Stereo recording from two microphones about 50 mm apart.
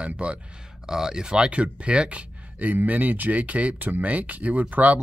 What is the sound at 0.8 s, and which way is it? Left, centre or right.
Speech, centre.